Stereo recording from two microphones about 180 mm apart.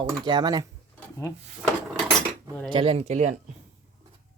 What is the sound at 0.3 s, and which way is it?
Speech, 25° right (ahead or behind).